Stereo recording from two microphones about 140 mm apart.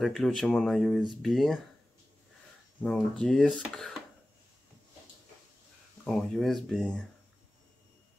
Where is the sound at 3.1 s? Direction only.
5° left (ahead or behind).